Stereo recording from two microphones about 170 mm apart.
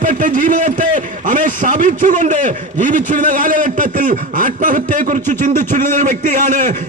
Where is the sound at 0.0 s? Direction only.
50° right (ahead or behind).